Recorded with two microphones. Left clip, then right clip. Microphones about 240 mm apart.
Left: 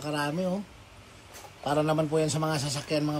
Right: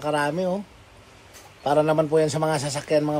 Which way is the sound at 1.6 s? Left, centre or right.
Right.